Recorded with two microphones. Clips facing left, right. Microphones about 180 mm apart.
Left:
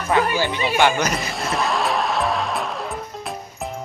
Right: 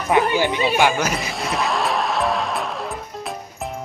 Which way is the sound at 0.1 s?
20° right (ahead or behind).